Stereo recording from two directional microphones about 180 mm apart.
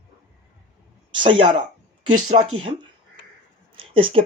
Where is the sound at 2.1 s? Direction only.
45° right (ahead or behind).